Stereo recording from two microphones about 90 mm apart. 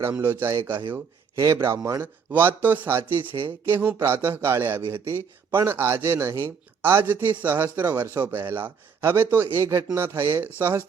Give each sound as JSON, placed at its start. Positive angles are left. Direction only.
{"t": 0.2, "sound": "a man's voice", "side_deg": -30}
{"t": 2.0, "sound": "a man's voice", "side_deg": -20}